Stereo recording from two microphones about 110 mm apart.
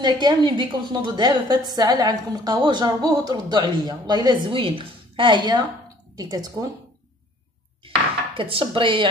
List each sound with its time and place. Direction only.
0.0 s a woman's voice: 40° right (ahead or behind)
8.4 s speech: 55° right (ahead or behind)